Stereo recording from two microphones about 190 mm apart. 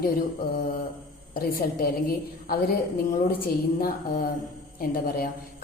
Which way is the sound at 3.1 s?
50° left (ahead or behind).